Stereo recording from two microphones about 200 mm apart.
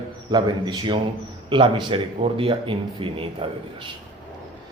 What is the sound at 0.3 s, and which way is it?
A man's voice, 20° right (ahead or behind).